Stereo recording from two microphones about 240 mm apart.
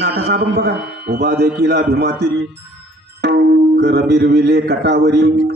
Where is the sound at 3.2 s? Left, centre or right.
Right.